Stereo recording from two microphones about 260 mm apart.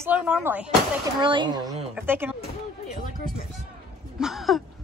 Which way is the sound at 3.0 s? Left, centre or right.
Left.